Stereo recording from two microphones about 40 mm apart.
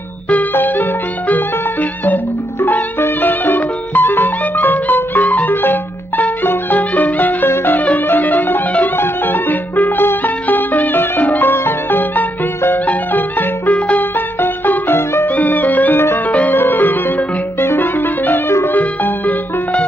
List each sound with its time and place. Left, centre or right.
0.6 s music: left
3.2 s music: left
6.8 s music: left
8.9 s music: left
11.4 s music: left
14.1 s music: left
15.2 s music: left
16.5 s music: left
17.6 s music: left
17.9 s music: left